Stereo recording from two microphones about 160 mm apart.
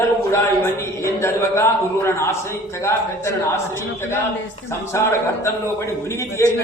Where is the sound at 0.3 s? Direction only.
15° left (ahead or behind).